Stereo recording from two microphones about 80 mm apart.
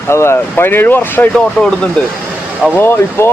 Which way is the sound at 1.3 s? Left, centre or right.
Centre.